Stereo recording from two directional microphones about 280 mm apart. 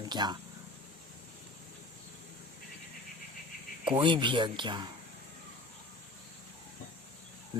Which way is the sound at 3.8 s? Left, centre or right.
Centre.